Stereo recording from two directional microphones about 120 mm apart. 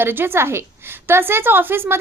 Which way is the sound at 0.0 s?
20° right (ahead or behind).